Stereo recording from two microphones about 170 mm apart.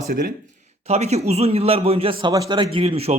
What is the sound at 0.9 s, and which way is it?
A man's voice, 40° right (ahead or behind).